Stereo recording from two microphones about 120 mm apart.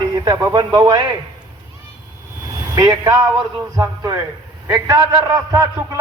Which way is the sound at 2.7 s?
30° right (ahead or behind).